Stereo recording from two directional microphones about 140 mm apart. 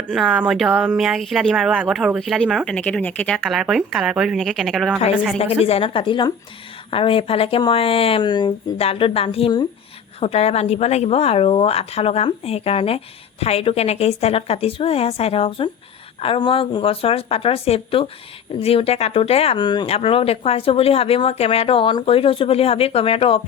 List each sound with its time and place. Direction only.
0.1 s speech: centre (ahead or behind)
5.6 s a woman's voice: 45° left (ahead or behind)
8.8 s a woman's voice: 45° left (ahead or behind)
19.9 s speech: 45° left (ahead or behind)